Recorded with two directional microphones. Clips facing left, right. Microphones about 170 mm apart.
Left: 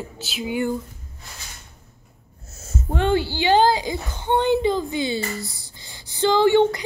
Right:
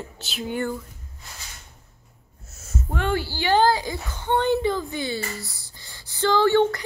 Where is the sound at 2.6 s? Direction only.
25° left (ahead or behind).